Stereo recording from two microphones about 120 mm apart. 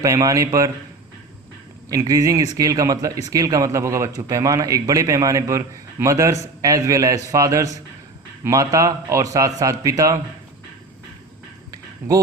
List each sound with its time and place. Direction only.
0.0 s speech: 30° right (ahead or behind)
1.9 s speech: 30° right (ahead or behind)
11.7 s a sound: 30° right (ahead or behind)